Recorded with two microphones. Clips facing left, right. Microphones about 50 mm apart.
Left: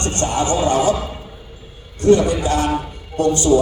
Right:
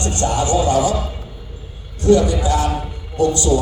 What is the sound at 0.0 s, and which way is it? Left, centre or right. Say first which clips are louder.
Music: even; left.